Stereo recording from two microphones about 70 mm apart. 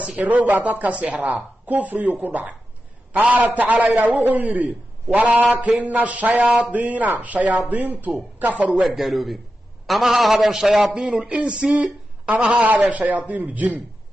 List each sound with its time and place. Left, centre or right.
0.0 s speech: right
8.9 s a man's voice: centre; by 13.8 s right